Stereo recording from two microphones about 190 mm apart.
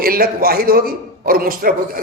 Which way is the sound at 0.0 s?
50° right (ahead or behind).